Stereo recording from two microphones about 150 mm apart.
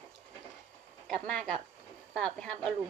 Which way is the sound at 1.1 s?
5° left (ahead or behind).